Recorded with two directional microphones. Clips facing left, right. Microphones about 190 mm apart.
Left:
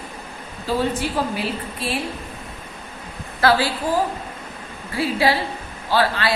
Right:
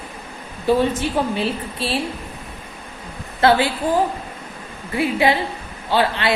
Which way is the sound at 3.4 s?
25° right (ahead or behind).